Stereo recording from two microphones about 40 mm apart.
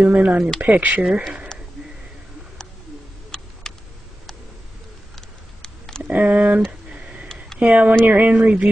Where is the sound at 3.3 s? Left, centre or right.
Centre.